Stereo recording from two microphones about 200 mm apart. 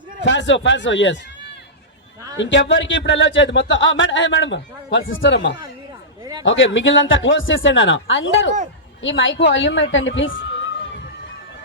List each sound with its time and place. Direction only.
0.3 s speech: 65° left (ahead or behind)
2.4 s speech: 65° left (ahead or behind)